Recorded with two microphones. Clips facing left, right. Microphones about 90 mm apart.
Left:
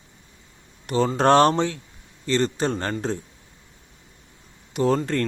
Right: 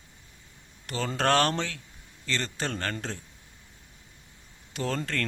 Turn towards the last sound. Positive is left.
turn(degrees=20)  # may be behind; listen again after turning